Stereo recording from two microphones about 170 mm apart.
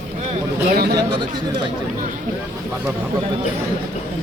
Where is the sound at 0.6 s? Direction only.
65° right (ahead or behind).